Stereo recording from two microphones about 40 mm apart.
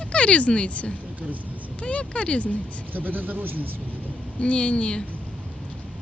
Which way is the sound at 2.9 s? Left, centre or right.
Right.